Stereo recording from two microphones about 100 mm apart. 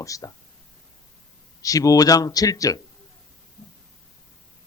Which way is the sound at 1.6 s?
35° left (ahead or behind).